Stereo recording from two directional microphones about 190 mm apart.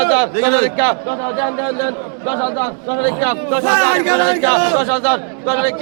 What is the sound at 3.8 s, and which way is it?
A capella, 5° right (ahead or behind).